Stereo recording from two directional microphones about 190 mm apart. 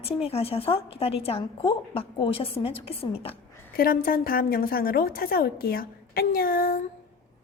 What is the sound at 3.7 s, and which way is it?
A woman's voice, 50° left (ahead or behind).